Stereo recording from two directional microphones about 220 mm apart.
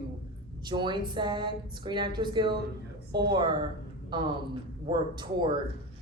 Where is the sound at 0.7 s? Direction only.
20° right (ahead or behind).